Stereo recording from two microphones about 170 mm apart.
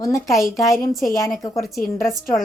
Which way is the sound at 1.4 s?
20° left (ahead or behind).